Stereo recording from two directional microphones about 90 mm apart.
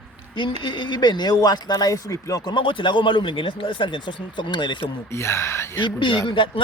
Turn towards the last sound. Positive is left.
turn(degrees=65)  # may be behind; listen again after turning